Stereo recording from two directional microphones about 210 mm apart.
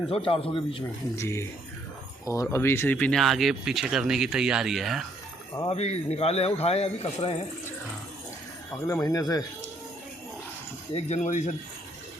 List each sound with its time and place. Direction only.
0.1 s a man's voice: 25° left (ahead or behind)
1.1 s speech: 15° left (ahead or behind)
5.6 s a man's voice: 30° left (ahead or behind)
8.9 s speech: 15° left (ahead or behind)
10.9 s speech: 35° left (ahead or behind)